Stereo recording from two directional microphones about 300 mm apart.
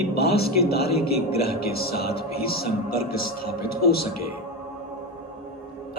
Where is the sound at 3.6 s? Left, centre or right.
Left.